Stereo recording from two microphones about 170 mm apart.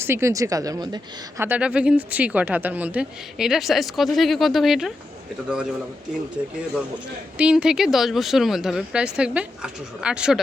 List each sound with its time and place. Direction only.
0.0 s speech: 15° right (ahead or behind)
1.4 s speech: 10° right (ahead or behind)
7.3 s speech: 5° right (ahead or behind)